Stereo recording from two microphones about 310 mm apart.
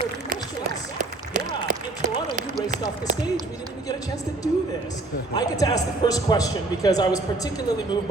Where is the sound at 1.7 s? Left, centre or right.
Right.